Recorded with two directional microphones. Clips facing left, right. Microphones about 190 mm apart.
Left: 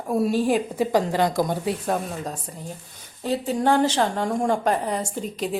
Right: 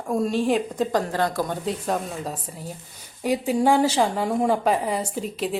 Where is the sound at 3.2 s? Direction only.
10° right (ahead or behind).